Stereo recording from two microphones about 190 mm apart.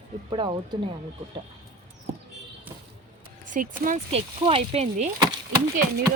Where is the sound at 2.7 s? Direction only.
10° right (ahead or behind).